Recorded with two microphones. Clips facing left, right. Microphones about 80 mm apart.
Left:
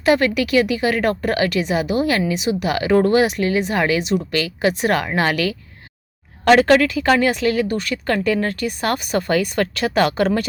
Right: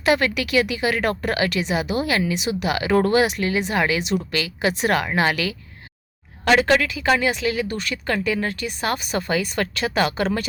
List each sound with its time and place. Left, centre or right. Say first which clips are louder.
0.0 s a woman's voice: left 3 dB; left